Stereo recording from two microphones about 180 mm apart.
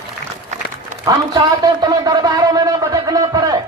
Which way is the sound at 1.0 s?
20° right (ahead or behind).